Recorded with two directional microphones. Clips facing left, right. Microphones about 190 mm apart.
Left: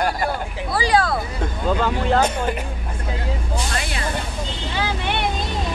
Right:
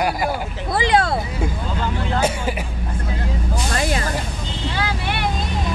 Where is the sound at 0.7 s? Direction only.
25° right (ahead or behind).